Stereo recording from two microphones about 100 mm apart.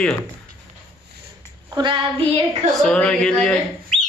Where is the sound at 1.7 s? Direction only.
50° right (ahead or behind).